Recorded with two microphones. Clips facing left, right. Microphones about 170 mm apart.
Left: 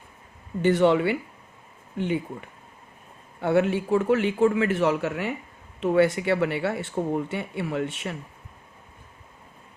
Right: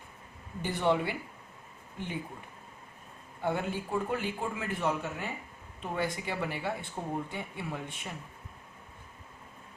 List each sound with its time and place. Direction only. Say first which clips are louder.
0.6 s a man's voice: left 9 dB; 80° left
3.4 s a man's voice: left 10 dB; 75° left (ahead or behind)